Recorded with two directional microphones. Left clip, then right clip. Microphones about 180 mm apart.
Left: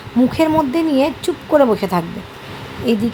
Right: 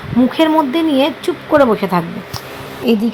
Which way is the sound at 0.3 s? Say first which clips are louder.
Right 3 dB; 5° right (ahead or behind).